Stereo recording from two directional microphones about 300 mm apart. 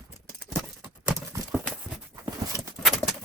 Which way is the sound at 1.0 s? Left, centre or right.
Centre.